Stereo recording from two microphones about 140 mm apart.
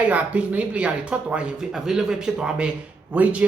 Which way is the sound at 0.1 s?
10° right (ahead or behind).